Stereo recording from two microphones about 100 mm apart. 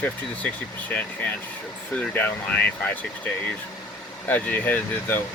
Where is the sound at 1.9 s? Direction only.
15° left (ahead or behind).